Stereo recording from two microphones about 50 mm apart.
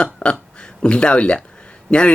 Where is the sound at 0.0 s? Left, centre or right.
Left.